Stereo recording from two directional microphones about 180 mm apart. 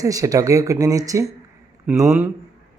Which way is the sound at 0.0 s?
20° right (ahead or behind).